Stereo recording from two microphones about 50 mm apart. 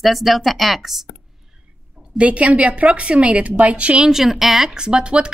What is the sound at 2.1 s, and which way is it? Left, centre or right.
A woman's voice, right.